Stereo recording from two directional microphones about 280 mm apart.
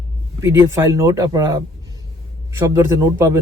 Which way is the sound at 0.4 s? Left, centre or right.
Centre.